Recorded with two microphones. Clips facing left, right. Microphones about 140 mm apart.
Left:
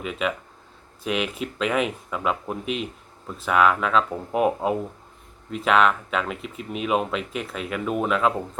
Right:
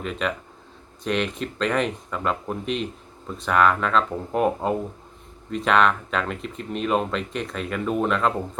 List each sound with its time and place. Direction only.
0.0 s speech: 5° left (ahead or behind)